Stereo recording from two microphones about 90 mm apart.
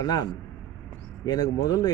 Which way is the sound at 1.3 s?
45° left (ahead or behind).